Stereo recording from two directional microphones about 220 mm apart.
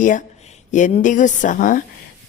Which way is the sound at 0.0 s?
35° left (ahead or behind).